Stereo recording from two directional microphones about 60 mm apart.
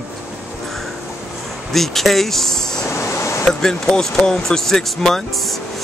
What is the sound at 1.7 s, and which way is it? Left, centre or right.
Speech, centre.